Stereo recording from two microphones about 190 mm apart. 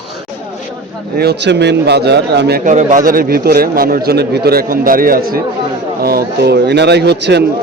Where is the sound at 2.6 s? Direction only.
40° right (ahead or behind).